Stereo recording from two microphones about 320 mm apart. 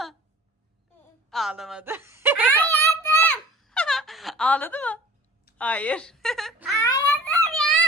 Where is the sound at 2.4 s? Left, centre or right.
Centre.